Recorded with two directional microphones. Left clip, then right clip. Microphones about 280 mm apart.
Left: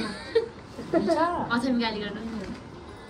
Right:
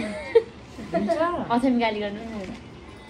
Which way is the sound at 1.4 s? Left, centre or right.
Centre.